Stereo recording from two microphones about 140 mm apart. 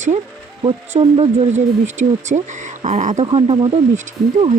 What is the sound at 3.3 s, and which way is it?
Speech, 45° right (ahead or behind).